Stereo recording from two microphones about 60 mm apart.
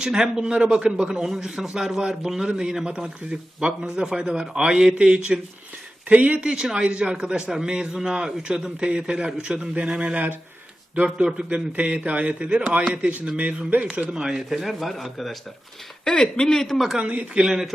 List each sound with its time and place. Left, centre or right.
0.0 s a man's voice: centre
6.1 s a man's voice: right
14.2 s speech: centre
17.0 s a man's voice: right
17.4 s a man's voice: centre